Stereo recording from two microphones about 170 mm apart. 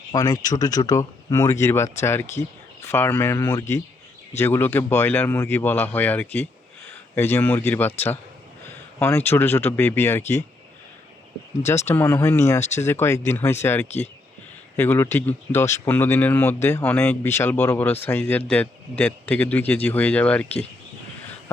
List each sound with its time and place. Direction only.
0.1 s speech: 20° left (ahead or behind)
9.0 s speech: 15° left (ahead or behind)
11.9 s speech: 15° left (ahead or behind)